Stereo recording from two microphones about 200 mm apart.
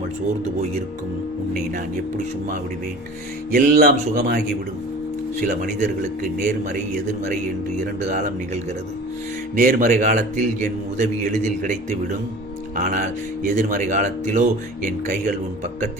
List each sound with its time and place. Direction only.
3.5 s speech: 40° right (ahead or behind)
5.4 s a man's voice: 40° right (ahead or behind)
8.0 s a man's voice: 40° right (ahead or behind)
9.6 s a man's voice: 40° right (ahead or behind)